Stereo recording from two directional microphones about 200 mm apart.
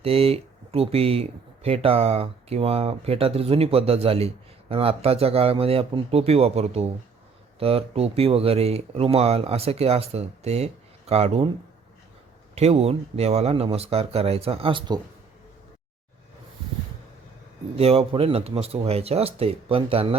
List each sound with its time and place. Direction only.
0.0 s speech: 30° right (ahead or behind)
12.5 s speech: 30° right (ahead or behind)
17.7 s speech: 30° right (ahead or behind)